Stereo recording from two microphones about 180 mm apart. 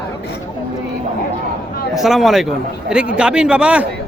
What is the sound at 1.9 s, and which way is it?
A man's voice, centre (ahead or behind).